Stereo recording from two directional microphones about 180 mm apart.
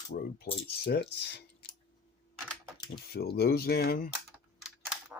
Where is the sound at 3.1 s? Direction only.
60° left (ahead or behind).